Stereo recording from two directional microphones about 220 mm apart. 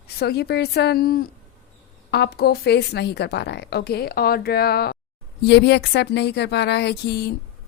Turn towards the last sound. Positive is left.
turn(degrees=50)  # may be behind; listen again after turning